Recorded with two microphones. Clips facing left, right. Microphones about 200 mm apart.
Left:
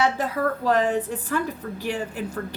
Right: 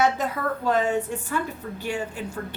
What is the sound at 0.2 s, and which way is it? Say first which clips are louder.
A woman's voice: left 2 dB; 35° left (ahead or behind).